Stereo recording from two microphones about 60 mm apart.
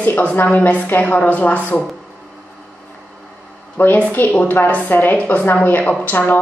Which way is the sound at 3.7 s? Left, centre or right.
Left.